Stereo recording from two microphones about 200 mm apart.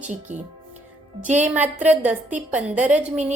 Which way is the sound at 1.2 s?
35° right (ahead or behind).